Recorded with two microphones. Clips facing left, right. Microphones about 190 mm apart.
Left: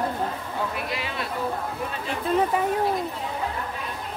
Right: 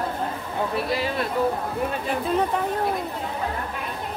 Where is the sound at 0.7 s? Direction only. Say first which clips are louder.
Right 6 dB; 40° right (ahead or behind).